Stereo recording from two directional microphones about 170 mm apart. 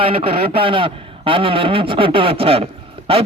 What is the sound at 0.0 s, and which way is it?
A man's voice, 35° right (ahead or behind).